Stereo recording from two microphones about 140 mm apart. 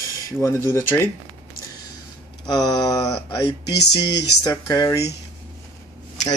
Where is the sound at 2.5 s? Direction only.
30° left (ahead or behind).